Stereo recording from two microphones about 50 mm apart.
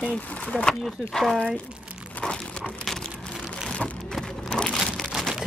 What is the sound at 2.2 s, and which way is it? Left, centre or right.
Crumpling, left.